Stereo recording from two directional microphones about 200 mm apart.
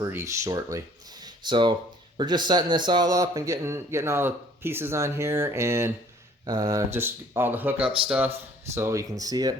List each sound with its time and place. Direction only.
0.0 s a man's voice: 15° right (ahead or behind)